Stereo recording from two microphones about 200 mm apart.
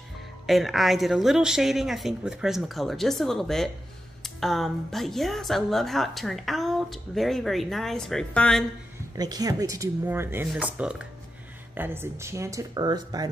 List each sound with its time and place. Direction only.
0.5 s speech: centre (ahead or behind)
9.1 s speech: 20° right (ahead or behind)